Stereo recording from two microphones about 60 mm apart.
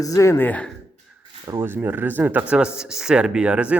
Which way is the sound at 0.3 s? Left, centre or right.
Left.